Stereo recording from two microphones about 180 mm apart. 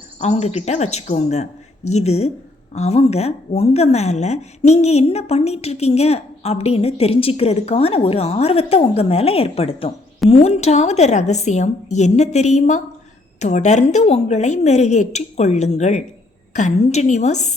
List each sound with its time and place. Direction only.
0.2 s a woman's voice: 35° left (ahead or behind)